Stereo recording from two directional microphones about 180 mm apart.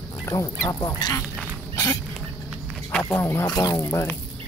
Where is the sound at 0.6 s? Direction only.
20° left (ahead or behind).